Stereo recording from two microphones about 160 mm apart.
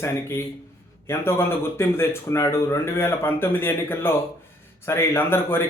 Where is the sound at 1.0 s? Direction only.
15° left (ahead or behind).